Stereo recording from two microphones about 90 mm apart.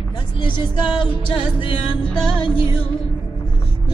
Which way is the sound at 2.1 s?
5° left (ahead or behind).